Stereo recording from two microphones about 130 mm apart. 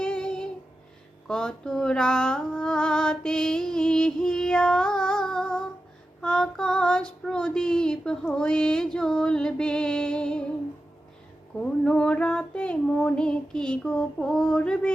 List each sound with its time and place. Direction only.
0.0 s child singing: 5° left (ahead or behind)
1.3 s music: 5° left (ahead or behind)
6.2 s child singing: 5° left (ahead or behind)
11.6 s child singing: 5° left (ahead or behind)